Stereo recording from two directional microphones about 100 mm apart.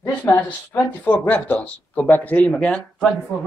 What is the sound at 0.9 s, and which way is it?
Speech, 15° left (ahead or behind).